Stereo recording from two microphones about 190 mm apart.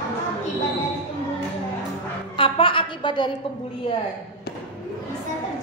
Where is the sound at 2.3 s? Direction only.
25° left (ahead or behind).